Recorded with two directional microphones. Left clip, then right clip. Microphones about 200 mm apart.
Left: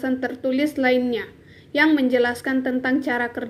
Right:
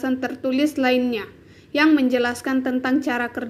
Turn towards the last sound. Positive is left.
turn(degrees=-10)  # may be behind; listen again after turning